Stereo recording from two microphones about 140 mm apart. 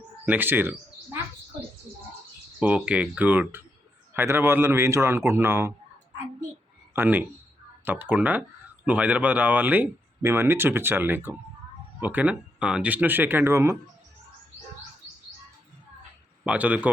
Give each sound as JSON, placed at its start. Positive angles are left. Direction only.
{"t": 0.3, "sound": "speech", "side_deg": -15}
{"t": 2.6, "sound": "speech", "side_deg": -10}
{"t": 6.9, "sound": "speech", "side_deg": -15}
{"t": 16.4, "sound": "speech", "side_deg": -10}